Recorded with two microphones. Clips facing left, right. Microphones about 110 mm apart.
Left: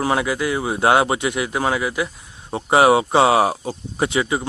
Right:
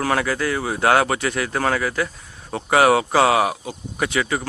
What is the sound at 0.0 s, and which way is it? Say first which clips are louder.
Speech: left 1 dB; 20° left (ahead or behind).